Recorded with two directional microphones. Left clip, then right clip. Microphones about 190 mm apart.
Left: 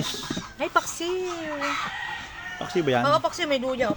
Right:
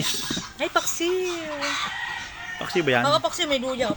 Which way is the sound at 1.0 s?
30° right (ahead or behind).